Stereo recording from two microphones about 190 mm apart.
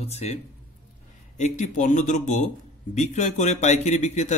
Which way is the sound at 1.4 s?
40° left (ahead or behind).